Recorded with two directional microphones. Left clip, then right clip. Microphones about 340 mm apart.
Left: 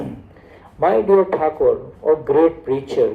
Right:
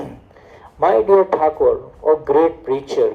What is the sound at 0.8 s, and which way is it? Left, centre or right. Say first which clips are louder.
Speech: right 2 dB; right.